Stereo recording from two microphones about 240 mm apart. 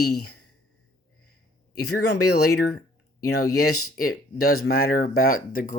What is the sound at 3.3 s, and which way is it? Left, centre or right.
Speech, left.